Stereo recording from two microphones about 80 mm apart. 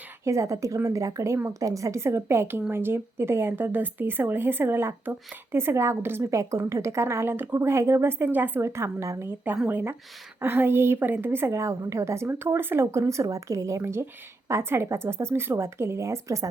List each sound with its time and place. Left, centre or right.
0.3 s a woman's voice: right
8.6 s a woman's voice: right